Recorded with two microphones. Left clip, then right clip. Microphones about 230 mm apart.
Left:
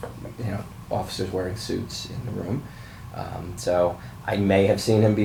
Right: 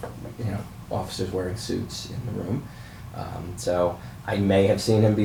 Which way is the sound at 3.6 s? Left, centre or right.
Left.